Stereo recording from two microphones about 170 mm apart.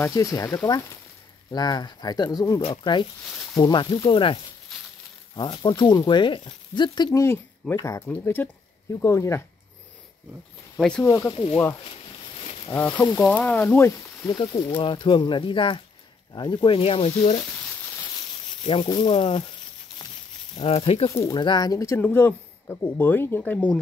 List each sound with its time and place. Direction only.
0.0 s speech: 20° left (ahead or behind)
10.8 s speech: 5° left (ahead or behind)
11.1 s speech: 20° left (ahead or behind)
12.7 s speech: 10° left (ahead or behind)
14.4 s speech: 30° left (ahead or behind)
18.6 s speech: 30° left (ahead or behind)
20.5 s speech: 35° left (ahead or behind)
21.1 s speech: 20° left (ahead or behind)